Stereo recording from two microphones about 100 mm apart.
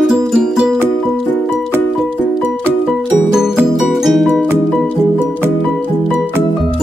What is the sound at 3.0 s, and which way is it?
Music, 10° right (ahead or behind).